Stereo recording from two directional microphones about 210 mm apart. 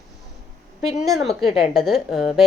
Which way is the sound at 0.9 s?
Centre (ahead or behind).